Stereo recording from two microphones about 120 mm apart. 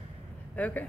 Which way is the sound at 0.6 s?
15° left (ahead or behind).